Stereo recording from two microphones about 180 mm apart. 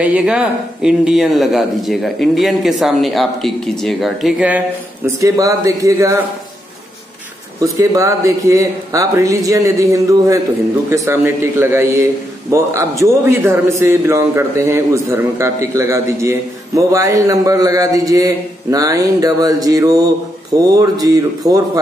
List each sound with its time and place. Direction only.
0.0 s a man's voice: 5° right (ahead or behind)
7.6 s a man's voice: 20° right (ahead or behind)